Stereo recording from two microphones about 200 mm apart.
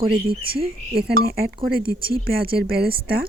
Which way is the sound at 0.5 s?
50° right (ahead or behind).